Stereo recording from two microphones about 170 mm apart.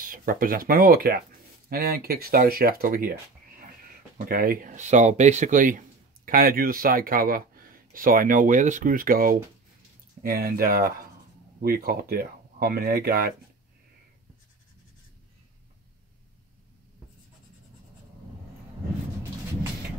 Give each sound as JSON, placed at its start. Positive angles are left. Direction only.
{"t": 0.0, "sound": "speech", "side_deg": -55}
{"t": 4.3, "sound": "speech", "side_deg": -60}